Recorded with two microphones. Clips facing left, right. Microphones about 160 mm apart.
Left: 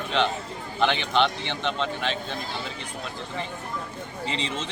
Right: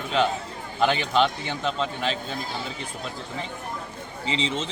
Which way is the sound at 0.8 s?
5° right (ahead or behind).